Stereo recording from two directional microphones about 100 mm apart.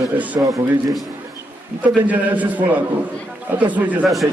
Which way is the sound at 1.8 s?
15° right (ahead or behind).